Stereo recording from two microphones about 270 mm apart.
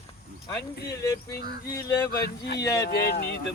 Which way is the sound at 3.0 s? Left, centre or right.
Left.